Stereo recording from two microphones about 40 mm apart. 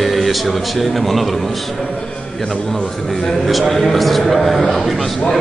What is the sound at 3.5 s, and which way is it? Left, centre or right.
A man's voice, centre.